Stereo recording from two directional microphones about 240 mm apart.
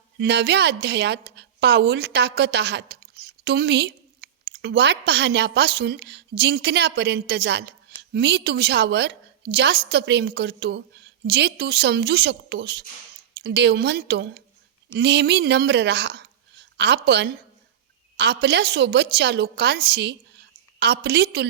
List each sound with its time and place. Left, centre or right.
0.2 s a woman's voice: right